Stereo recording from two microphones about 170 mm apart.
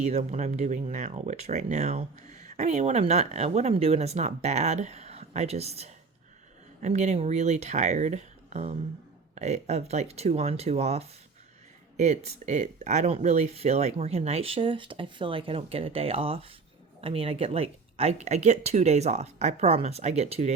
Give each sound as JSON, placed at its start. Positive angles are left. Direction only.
{"t": 0.0, "sound": "speech", "side_deg": -40}